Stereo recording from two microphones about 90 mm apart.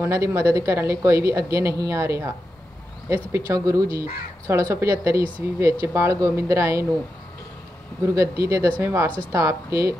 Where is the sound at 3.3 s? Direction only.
35° right (ahead or behind).